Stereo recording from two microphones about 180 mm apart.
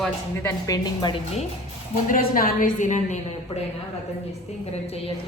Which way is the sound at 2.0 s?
50° left (ahead or behind).